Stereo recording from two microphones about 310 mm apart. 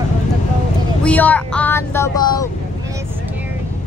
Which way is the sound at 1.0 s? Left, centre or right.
Centre.